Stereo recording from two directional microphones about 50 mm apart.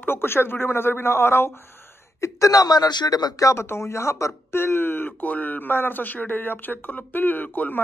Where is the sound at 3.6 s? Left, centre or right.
Left.